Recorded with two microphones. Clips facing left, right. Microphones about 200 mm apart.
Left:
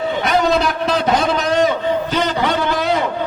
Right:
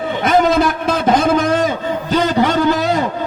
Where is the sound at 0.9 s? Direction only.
50° right (ahead or behind).